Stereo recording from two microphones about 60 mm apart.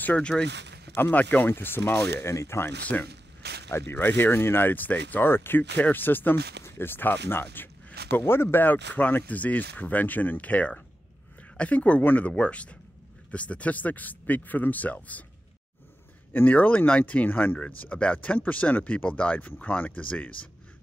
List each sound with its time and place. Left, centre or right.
0.0 s speech: left
1.1 s speech: left
1.5 s speech: left
3.7 s speech: left
16.3 s speech: left